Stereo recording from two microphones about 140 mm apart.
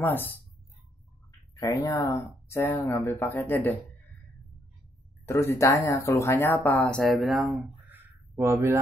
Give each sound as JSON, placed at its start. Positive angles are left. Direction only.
{"t": 0.0, "sound": "speech", "side_deg": 15}
{"t": 1.5, "sound": "speech", "side_deg": 25}
{"t": 5.2, "sound": "speech", "side_deg": 20}
{"t": 7.9, "sound": "a sound", "side_deg": -20}